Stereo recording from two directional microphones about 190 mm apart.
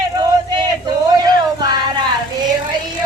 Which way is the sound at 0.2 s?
20° right (ahead or behind).